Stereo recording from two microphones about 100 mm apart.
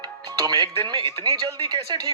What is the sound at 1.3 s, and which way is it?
Speech, 50° right (ahead or behind).